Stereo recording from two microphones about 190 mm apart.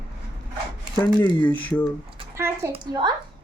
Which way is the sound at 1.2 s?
10° left (ahead or behind).